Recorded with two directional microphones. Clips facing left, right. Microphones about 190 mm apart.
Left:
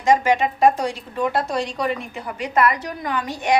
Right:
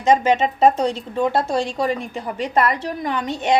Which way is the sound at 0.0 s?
20° right (ahead or behind).